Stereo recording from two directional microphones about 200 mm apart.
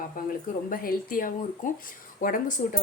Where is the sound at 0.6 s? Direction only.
45° left (ahead or behind).